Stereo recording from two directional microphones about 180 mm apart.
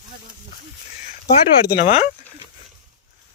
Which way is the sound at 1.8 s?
35° left (ahead or behind).